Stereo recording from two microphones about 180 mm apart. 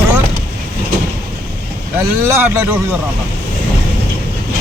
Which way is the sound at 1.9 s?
15° right (ahead or behind).